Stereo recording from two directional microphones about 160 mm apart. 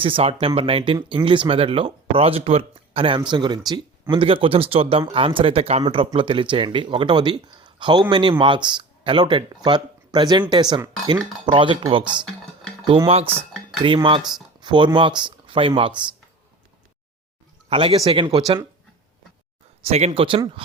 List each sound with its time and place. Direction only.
0.0 s speech: 35° right (ahead or behind)
13.1 s speech: 40° right (ahead or behind)
14.6 s a sound: 30° right (ahead or behind)
14.9 s speech: 30° right (ahead or behind)
17.7 s speech: 35° right (ahead or behind)
18.3 s speech: 25° right (ahead or behind)
19.8 s speech: 40° right (ahead or behind)